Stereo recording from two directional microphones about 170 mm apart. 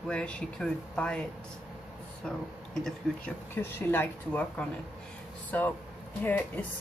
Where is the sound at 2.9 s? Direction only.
10° left (ahead or behind).